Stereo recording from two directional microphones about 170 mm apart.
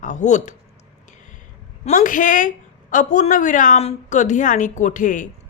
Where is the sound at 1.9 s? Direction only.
50° left (ahead or behind).